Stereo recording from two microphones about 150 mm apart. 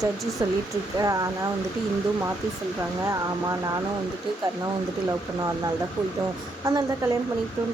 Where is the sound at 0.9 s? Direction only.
25° right (ahead or behind).